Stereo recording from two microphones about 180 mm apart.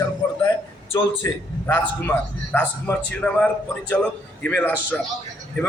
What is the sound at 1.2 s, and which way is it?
A man's voice, 20° left (ahead or behind).